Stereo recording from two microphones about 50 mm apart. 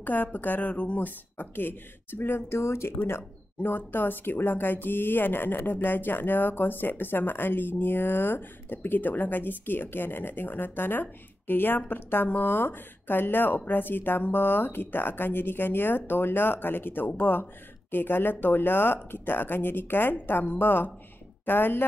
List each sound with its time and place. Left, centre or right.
0.0 s a woman's voice: left
2.5 s speech: left
3.1 s speech: left